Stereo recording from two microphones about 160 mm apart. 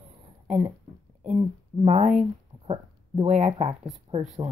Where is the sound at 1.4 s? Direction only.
40° right (ahead or behind).